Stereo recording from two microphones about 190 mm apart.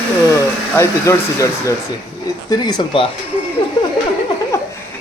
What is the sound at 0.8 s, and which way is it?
A man's voice, 15° left (ahead or behind).